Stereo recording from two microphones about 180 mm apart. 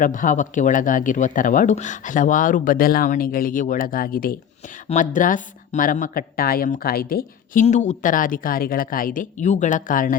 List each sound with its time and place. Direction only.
0.0 s speech: 50° left (ahead or behind)